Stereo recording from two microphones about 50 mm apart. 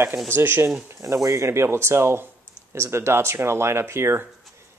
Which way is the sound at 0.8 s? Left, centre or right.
Right.